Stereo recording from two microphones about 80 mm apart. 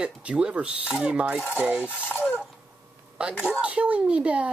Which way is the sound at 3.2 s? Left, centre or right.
Centre.